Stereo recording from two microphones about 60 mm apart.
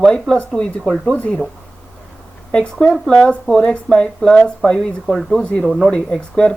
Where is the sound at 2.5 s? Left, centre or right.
Centre.